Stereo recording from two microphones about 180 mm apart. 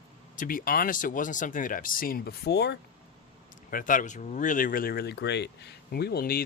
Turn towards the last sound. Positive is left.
turn(degrees=55)  # may be behind; listen again after turning